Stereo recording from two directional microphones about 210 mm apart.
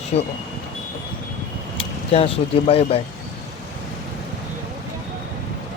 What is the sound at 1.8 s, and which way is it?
Speech, 30° left (ahead or behind).